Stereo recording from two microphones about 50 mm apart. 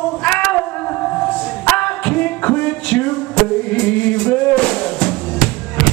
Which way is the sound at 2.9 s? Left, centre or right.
Left.